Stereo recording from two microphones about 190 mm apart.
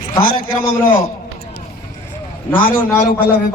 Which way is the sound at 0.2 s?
45° left (ahead or behind).